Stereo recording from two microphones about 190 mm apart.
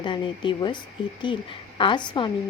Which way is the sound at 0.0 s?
25° left (ahead or behind).